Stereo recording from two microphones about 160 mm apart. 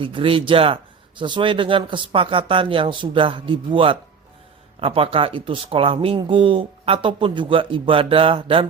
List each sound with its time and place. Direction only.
0.0 s speech: 35° right (ahead or behind)